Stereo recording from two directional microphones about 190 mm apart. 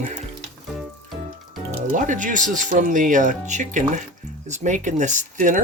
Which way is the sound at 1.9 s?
45° right (ahead or behind).